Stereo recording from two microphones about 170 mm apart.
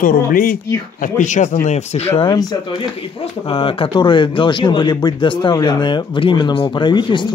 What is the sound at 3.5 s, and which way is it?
A man's voice, 30° left (ahead or behind).